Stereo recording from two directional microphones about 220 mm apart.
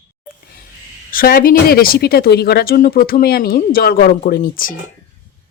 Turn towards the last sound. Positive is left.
turn(degrees=40)  # may be behind; listen again after turning